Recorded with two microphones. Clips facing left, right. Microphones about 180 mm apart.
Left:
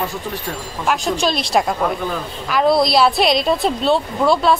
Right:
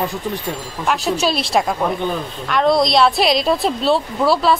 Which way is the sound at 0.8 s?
Centre (ahead or behind).